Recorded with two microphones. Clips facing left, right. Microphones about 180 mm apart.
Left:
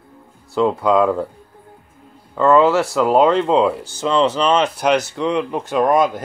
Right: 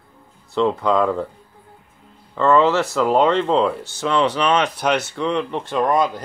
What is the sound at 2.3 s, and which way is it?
Speech, 5° left (ahead or behind).